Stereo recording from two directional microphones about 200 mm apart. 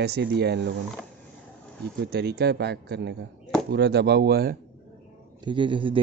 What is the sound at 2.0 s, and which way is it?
Speech, 55° right (ahead or behind).